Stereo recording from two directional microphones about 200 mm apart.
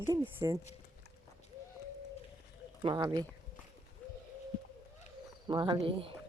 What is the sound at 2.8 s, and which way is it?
Speech, 20° right (ahead or behind).